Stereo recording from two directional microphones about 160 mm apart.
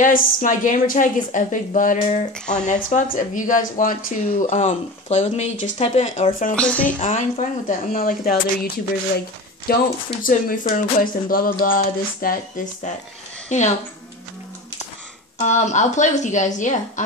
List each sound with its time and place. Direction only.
0.0 s a woman's voice: 55° left (ahead or behind)
6.5 s speech: 10° left (ahead or behind)
7.0 s speech: 50° left (ahead or behind); by 9.8 s 70° left (ahead or behind)
10.2 s speech: 60° left (ahead or behind)
13.5 s a woman's voice: 45° left (ahead or behind)
15.3 s a woman's voice: 50° left (ahead or behind)